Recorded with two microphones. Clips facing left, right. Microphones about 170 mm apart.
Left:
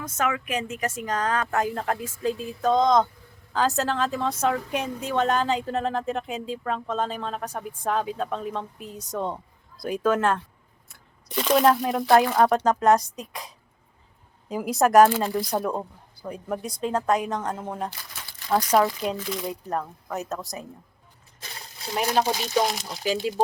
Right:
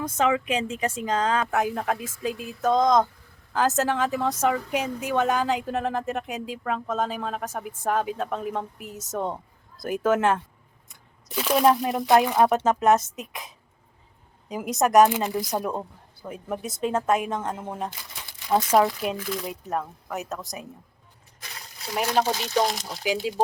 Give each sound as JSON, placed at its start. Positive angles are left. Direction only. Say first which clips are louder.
{"t": 0.3, "sound": "speech", "louder": "right 4 dB", "side_deg": -25}
{"t": 1.5, "sound": "speech", "louder": "right 1 dB", "side_deg": -10}
{"t": 12.0, "sound": "speech", "louder": "even", "side_deg": -15}
{"t": 14.4, "sound": "speech", "louder": "left 2 dB", "side_deg": 0}
{"t": 15.0, "sound": "speech", "louder": "left 1 dB", "side_deg": -15}
{"t": 15.7, "sound": "speech", "louder": "left 1 dB", "side_deg": 0}
{"t": 16.6, "sound": "speech", "louder": "right 1 dB", "side_deg": -20}
{"t": 17.5, "sound": "speech", "louder": "left 1 dB", "side_deg": -5}
{"t": 20.5, "sound": "speech", "louder": "left 1 dB", "side_deg": -20}
{"t": 22.0, "sound": "speech", "louder": "even", "side_deg": 10}